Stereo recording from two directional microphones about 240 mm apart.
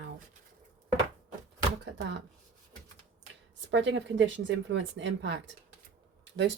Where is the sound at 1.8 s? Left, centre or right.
Right.